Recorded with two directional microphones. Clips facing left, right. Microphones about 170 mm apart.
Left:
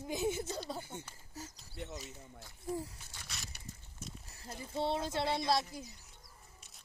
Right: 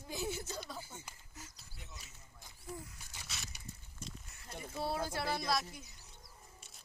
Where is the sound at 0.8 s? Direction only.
65° left (ahead or behind).